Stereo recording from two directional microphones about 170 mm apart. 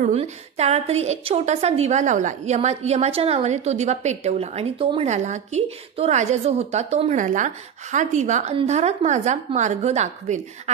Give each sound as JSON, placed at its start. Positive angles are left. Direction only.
{"t": 0.0, "sound": "a woman's voice", "side_deg": -40}